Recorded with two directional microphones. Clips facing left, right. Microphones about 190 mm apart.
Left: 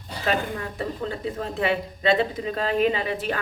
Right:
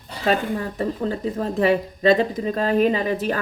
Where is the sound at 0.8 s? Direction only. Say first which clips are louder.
Right 4 dB; 40° right (ahead or behind).